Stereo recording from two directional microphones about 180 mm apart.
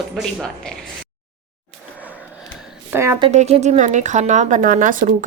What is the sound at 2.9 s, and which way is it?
Speech, 15° right (ahead or behind).